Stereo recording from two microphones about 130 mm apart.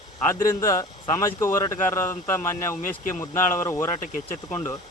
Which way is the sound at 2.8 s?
90° left.